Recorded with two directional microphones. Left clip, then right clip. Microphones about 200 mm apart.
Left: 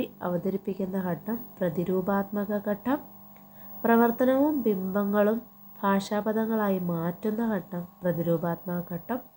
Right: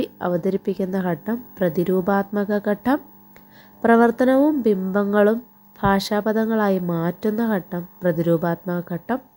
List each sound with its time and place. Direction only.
0.0 s a woman's voice: 35° right (ahead or behind)